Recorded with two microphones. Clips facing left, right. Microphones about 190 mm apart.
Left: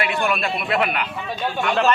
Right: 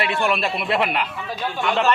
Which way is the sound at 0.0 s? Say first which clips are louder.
Right 1 dB; 25° right (ahead or behind).